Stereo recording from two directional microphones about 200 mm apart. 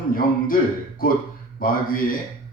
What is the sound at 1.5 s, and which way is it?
Speech, 45° left (ahead or behind).